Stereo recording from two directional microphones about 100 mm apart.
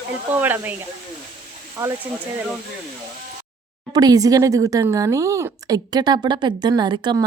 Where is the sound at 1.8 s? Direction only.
45° right (ahead or behind).